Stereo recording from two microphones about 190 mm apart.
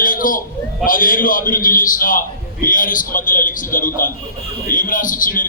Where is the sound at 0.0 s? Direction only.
45° left (ahead or behind).